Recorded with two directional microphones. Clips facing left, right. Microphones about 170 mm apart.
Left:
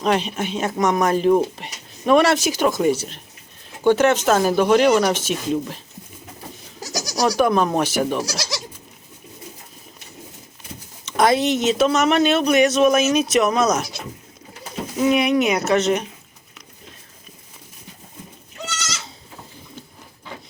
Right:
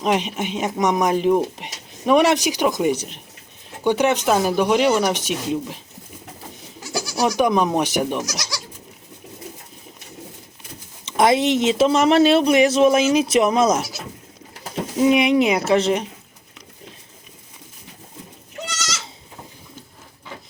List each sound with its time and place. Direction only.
0.0 s speech: 15° right (ahead or behind)
6.7 s goat: 40° left (ahead or behind)
7.3 s speech: 15° right (ahead or behind)
8.2 s speech: 30° left (ahead or behind)
11.0 s speech: 25° right (ahead or behind)
14.9 s speech: 20° right (ahead or behind)